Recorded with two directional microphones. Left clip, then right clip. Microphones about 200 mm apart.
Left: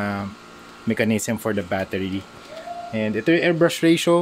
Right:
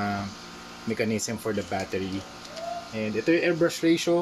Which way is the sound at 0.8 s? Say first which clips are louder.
Left 6 dB; 40° left (ahead or behind).